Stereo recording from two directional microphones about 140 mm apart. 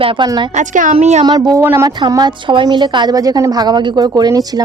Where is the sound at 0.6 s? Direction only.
65° right (ahead or behind).